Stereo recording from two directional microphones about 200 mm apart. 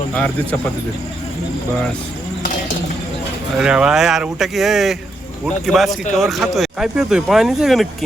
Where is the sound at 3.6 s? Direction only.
5° right (ahead or behind).